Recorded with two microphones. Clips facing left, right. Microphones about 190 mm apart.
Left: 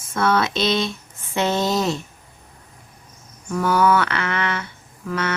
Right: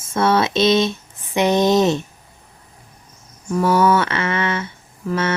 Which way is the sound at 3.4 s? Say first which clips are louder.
Right 2 dB; 25° right (ahead or behind).